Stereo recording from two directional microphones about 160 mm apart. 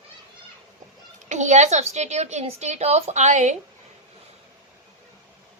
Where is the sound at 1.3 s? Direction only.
50° right (ahead or behind).